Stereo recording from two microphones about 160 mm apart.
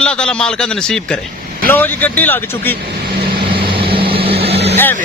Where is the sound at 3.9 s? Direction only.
35° right (ahead or behind).